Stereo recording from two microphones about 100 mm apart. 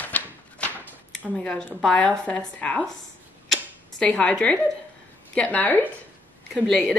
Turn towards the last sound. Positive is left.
turn(degrees=10)  # may be behind; listen again after turning